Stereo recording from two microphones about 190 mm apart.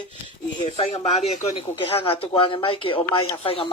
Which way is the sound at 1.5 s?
30° left (ahead or behind).